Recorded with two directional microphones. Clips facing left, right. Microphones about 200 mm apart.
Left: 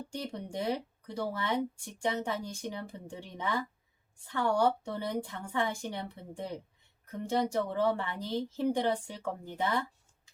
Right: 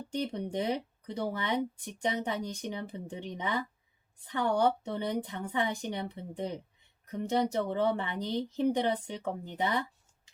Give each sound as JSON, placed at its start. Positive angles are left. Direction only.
{"t": 0.1, "sound": "speech", "side_deg": -20}